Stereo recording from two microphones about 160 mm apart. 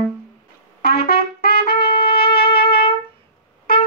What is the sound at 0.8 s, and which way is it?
Trumpet, 75° left (ahead or behind).